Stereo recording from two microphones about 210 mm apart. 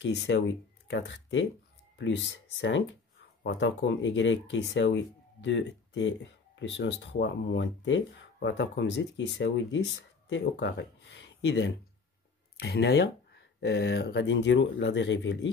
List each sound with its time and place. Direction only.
0.0 s speech: 55° left (ahead or behind)